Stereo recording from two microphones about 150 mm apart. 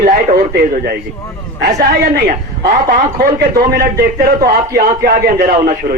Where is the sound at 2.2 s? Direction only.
75° right (ahead or behind).